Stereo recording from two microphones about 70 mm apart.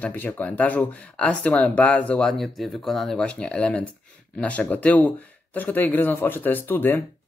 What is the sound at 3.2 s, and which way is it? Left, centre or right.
Speech, centre.